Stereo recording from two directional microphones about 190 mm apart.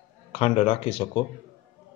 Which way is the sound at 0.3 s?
30° left (ahead or behind).